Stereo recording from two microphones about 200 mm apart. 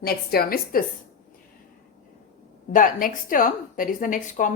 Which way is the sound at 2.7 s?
45° left (ahead or behind).